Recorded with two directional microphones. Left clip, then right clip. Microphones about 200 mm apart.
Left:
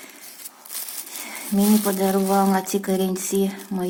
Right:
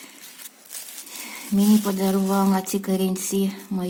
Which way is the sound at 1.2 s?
55° right (ahead or behind).